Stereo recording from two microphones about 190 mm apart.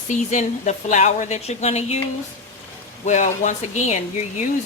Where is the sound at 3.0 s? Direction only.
40° left (ahead or behind).